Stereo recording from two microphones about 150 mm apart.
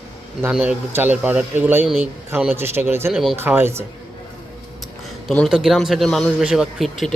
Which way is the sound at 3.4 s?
15° right (ahead or behind).